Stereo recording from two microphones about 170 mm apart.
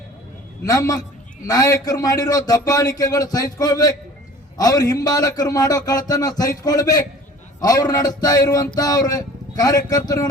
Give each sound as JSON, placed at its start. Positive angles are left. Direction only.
{"t": 0.6, "sound": "speech", "side_deg": 20}